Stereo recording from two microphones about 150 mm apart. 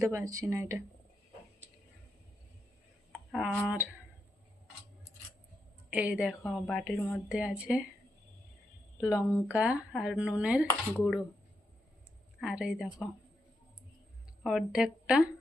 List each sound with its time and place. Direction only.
0.0 s speech: 20° right (ahead or behind)
3.1 s a sound: 5° right (ahead or behind)
5.9 s a woman's voice: 10° right (ahead or behind)
7.3 s speech: 5° right (ahead or behind)
9.0 s speech: 20° left (ahead or behind)
9.2 s a woman's voice: 5° right (ahead or behind)
12.4 s a woman's voice: 5° right (ahead or behind)
14.4 s a woman's voice: 5° right (ahead or behind)